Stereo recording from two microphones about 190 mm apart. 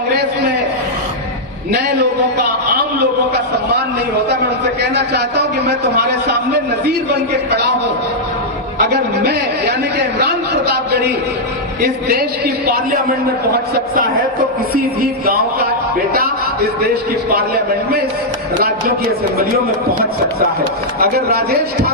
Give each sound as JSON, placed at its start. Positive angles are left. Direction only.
{"t": 1.7, "sound": "a man's voice", "side_deg": -60}
{"t": 4.8, "sound": "a man's voice", "side_deg": -60}
{"t": 8.9, "sound": "a man's voice", "side_deg": -55}
{"t": 14.7, "sound": "speech", "side_deg": -50}
{"t": 21.0, "sound": "a man's voice", "side_deg": -55}